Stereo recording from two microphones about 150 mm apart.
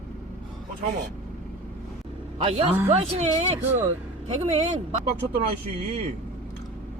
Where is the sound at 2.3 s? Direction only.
40° right (ahead or behind).